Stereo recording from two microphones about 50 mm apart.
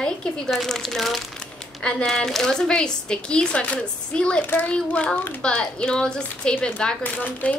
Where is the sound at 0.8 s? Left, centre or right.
Centre; by 7.6 s left.